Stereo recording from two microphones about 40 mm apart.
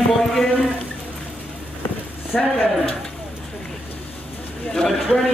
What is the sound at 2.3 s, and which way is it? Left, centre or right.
Speech, left.